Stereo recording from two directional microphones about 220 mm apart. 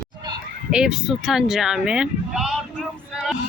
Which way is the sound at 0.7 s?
5° right (ahead or behind).